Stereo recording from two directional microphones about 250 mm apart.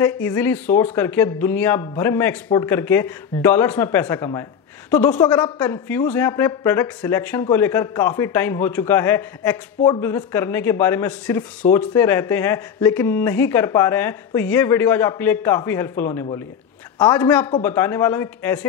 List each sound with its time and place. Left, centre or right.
0.0 s speech: centre